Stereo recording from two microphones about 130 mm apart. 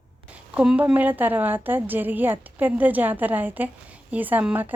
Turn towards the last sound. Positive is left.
turn(degrees=-10)  # may be behind; listen again after turning